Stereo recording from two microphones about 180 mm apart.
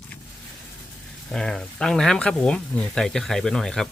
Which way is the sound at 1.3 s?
5° left (ahead or behind).